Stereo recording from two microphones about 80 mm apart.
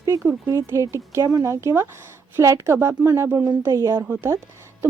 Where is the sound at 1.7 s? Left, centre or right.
Right.